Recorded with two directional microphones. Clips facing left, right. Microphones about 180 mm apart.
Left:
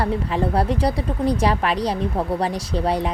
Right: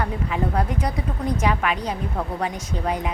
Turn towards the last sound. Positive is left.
turn(degrees=35)  # may be behind; listen again after turning